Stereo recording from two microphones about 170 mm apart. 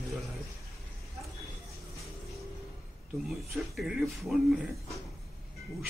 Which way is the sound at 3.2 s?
Centre (ahead or behind).